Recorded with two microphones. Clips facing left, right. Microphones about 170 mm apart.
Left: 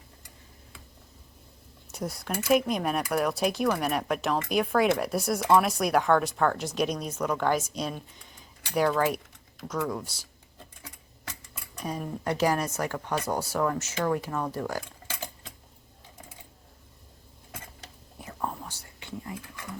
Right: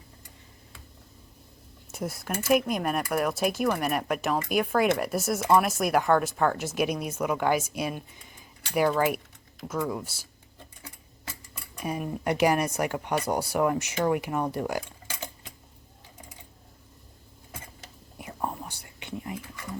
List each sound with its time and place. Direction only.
1.9 s speech: 5° right (ahead or behind)
11.8 s speech: 10° right (ahead or behind)
18.2 s whispering: 15° right (ahead or behind)